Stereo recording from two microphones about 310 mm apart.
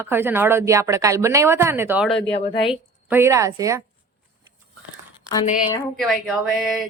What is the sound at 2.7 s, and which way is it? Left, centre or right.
A woman's voice, centre.